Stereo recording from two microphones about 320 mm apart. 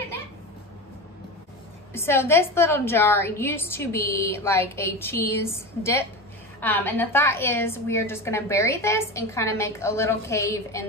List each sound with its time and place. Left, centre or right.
2.0 s a woman's voice: centre